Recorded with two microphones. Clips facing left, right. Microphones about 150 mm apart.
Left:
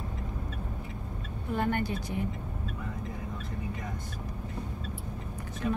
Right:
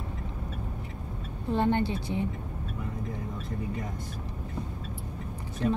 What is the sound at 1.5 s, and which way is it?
Speech, 25° right (ahead or behind).